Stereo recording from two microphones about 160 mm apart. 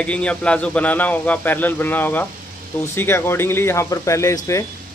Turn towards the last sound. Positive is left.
turn(degrees=20)  # may be behind; listen again after turning